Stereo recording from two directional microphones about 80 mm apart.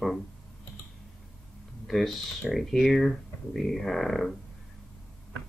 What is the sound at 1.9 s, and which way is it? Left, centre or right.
Speech, centre.